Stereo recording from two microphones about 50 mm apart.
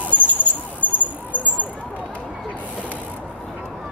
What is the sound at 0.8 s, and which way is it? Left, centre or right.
Cricket, left.